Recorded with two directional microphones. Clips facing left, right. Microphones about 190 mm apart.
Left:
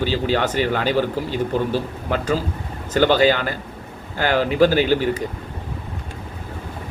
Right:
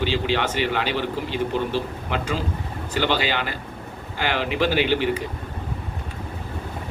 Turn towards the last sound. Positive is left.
turn(degrees=40)  # may be behind; listen again after turning